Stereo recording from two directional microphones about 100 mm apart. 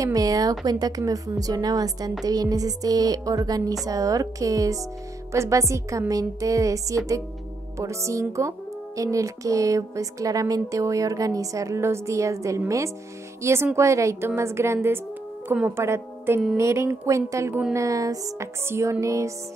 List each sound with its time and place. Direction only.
0.0 s a woman's voice: 35° right (ahead or behind)